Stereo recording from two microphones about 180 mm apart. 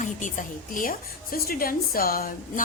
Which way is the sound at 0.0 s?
45° left (ahead or behind).